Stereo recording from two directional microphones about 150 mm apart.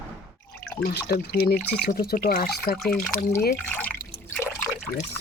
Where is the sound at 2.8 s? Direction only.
Centre (ahead or behind).